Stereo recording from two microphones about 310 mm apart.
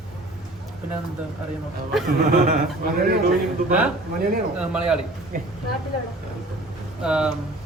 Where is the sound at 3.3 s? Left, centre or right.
Centre.